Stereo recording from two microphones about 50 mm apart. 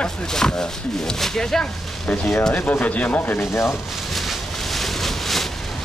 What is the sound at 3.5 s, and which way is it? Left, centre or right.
Speech, left.